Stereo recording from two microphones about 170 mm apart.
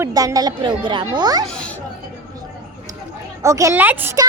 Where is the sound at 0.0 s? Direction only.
20° right (ahead or behind).